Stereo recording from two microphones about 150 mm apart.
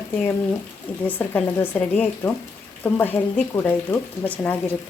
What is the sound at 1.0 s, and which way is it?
Speech, 10° left (ahead or behind).